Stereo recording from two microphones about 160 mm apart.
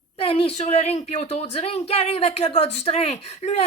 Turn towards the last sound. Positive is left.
turn(degrees=40)  # may be behind; listen again after turning